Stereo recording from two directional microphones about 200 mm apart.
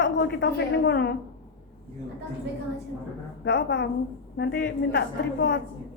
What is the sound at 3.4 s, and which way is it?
A woman's voice, 60° left (ahead or behind).